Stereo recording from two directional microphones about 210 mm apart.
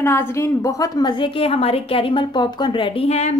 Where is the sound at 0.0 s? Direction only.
10° left (ahead or behind).